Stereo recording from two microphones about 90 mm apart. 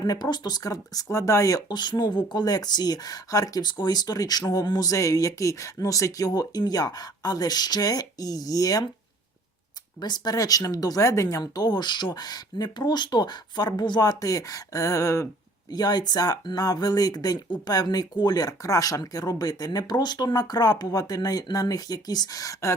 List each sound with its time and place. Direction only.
0.0 s speech: 45° left (ahead or behind)
10.0 s speech: 50° left (ahead or behind)
15.7 s speech: 50° left (ahead or behind)